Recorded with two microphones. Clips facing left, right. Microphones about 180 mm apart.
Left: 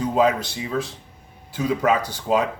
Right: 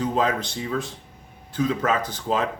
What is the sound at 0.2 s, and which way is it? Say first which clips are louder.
Speech: left 4 dB; 10° left (ahead or behind).